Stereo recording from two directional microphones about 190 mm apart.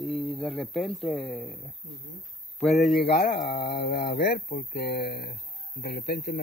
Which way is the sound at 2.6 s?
Centre (ahead or behind).